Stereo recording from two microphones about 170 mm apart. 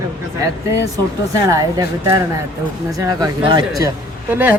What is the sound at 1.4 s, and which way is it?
Speech, 20° right (ahead or behind).